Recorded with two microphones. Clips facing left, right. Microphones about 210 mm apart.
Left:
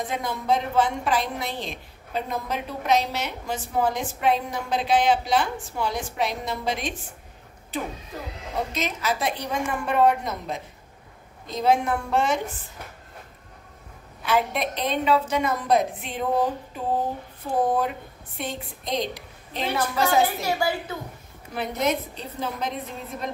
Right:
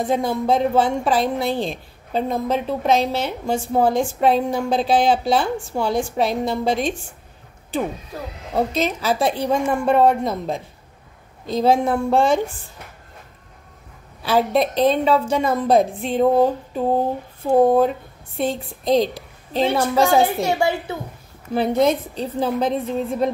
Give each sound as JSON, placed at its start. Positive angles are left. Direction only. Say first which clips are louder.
{"t": 0.0, "sound": "a woman's voice", "louder": "right 9 dB", "side_deg": -30}
{"t": 14.2, "sound": "a woman's voice", "louder": "right 6 dB", "side_deg": -35}
{"t": 18.4, "sound": "a woman's voice", "louder": "right 9 dB", "side_deg": -30}